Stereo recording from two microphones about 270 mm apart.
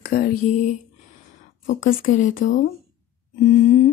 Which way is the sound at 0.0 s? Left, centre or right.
Left.